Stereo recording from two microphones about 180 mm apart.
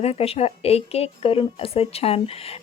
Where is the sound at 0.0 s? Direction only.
35° left (ahead or behind).